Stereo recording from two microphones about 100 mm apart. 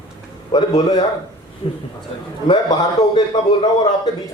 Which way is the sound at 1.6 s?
65° left (ahead or behind).